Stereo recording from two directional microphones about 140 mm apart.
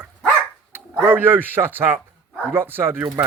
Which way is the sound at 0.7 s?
15° right (ahead or behind).